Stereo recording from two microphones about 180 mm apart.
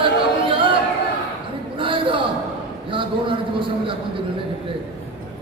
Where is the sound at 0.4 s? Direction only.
30° right (ahead or behind).